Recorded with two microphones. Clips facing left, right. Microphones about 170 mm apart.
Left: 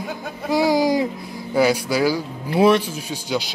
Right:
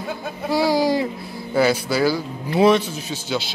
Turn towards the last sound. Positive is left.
turn(degrees=15)  # may be behind; listen again after turning